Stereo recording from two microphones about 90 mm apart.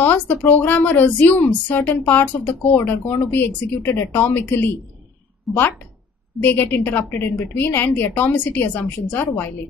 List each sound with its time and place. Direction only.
0.0 s a woman's voice: 20° left (ahead or behind)
6.4 s a woman's voice: 25° left (ahead or behind)